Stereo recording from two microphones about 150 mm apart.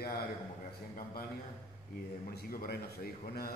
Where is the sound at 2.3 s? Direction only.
85° left.